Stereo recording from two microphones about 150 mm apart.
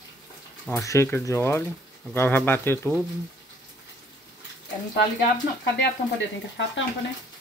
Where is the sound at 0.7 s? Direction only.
20° left (ahead or behind).